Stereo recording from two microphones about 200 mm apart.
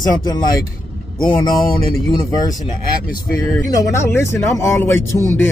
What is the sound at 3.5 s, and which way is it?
A man's voice, 15° left (ahead or behind).